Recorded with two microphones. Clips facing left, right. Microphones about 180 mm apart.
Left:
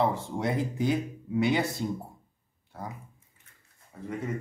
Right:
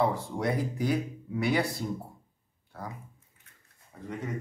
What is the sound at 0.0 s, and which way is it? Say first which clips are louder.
Speech: even; 25° left (ahead or behind).